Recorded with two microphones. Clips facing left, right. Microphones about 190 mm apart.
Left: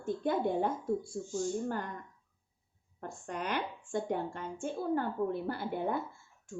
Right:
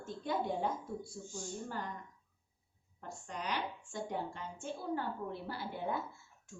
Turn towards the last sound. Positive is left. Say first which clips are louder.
# left 5 dB
turn(degrees=55)  # may be behind; listen again after turning